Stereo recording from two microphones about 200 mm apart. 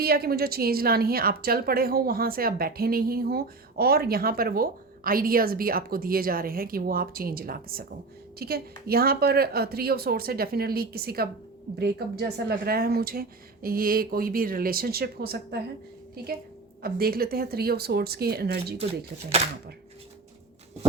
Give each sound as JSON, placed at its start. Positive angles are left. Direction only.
{"t": 0.0, "sound": "a woman's voice", "side_deg": -50}
{"t": 16.8, "sound": "a woman's voice", "side_deg": -50}